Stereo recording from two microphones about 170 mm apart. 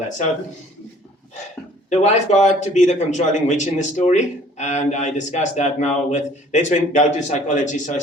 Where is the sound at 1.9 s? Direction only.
45° left (ahead or behind).